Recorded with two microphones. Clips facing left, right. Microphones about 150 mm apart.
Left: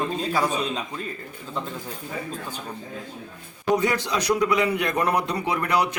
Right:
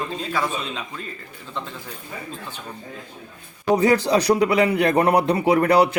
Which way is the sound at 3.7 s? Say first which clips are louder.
Right 6 dB; 35° right (ahead or behind).